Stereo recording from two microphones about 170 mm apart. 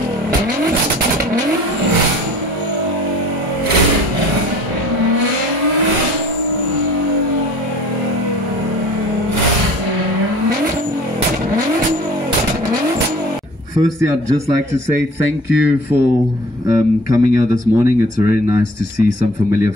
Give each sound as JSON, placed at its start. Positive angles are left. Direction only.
{"t": 16.6, "sound": "speech", "side_deg": -20}